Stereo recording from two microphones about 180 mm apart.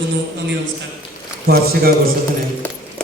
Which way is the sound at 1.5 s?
60° right (ahead or behind).